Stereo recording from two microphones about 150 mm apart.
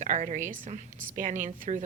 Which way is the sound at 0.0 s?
55° right (ahead or behind).